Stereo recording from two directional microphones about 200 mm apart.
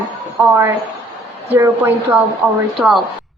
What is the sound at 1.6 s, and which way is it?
Speech, 10° right (ahead or behind).